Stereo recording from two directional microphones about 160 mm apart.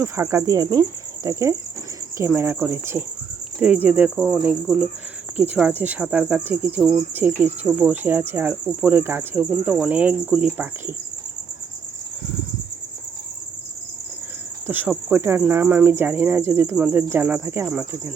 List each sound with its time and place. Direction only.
0.0 s speech: 15° right (ahead or behind)
2.1 s cricket: 15° right (ahead or behind)
4.4 s speech: 5° right (ahead or behind)
5.4 s cricket: 10° right (ahead or behind)
14.7 s cricket: 10° right (ahead or behind)